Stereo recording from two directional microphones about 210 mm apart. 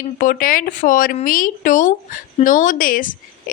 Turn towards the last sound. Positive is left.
turn(degrees=40)  # may be behind; listen again after turning